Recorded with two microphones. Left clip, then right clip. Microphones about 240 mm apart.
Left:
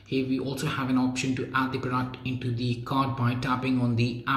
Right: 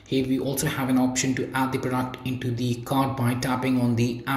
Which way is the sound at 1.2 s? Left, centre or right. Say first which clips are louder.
Right 2 dB; centre.